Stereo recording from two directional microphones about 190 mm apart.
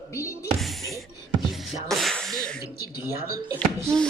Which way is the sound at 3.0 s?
15° right (ahead or behind).